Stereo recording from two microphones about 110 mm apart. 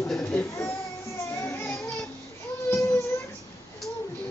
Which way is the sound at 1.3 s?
25° left (ahead or behind).